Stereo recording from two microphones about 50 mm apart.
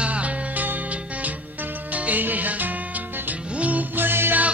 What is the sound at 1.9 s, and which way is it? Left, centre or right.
Music, right.